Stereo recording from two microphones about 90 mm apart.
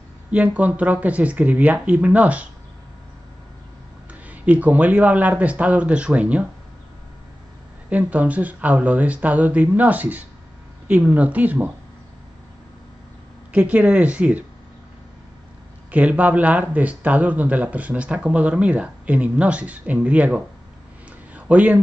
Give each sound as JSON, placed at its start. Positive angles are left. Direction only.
{"t": 0.3, "sound": "speech", "side_deg": -15}
{"t": 4.1, "sound": "speech", "side_deg": -15}
{"t": 7.9, "sound": "speech", "side_deg": -15}
{"t": 13.5, "sound": "speech", "side_deg": -15}
{"t": 15.9, "sound": "speech", "side_deg": -15}